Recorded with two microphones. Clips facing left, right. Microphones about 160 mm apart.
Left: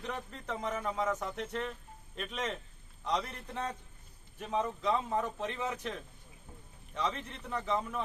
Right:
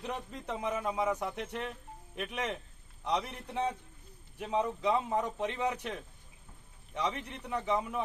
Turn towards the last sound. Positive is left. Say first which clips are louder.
# right 2 dB
turn(degrees=-15)  # may be behind; listen again after turning